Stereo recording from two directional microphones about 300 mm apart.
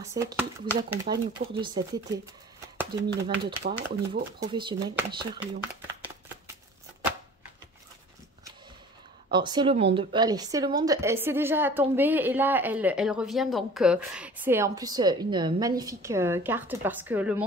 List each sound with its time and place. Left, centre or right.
0.0 s a woman's voice: centre
6.0 s a sound: centre
9.3 s a woman's voice: centre